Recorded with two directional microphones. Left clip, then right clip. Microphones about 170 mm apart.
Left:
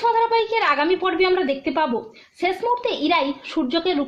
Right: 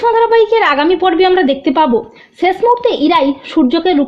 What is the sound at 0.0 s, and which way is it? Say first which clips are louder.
A woman's voice: right 9 dB; 45° right (ahead or behind).